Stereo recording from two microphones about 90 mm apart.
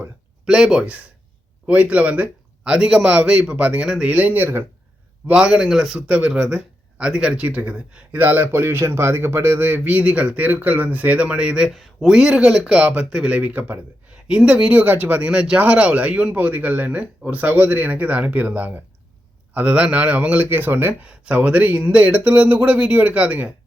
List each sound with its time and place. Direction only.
0.4 s speech: 5° right (ahead or behind); by 4.6 s 20° right (ahead or behind)
5.2 s speech: 10° right (ahead or behind)